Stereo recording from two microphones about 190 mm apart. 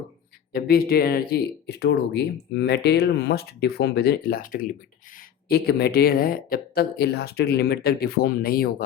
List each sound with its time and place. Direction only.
0.5 s speech: 55° left (ahead or behind)